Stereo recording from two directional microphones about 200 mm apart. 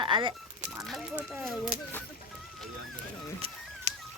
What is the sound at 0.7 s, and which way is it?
Speech, centre (ahead or behind).